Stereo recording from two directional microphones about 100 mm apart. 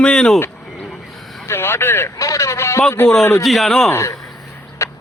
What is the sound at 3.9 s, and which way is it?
Speech, 25° left (ahead or behind).